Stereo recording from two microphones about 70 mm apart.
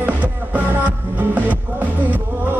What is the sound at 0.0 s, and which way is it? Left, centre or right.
Music, right.